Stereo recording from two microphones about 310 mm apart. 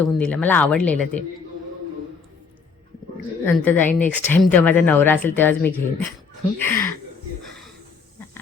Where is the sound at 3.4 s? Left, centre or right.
Centre.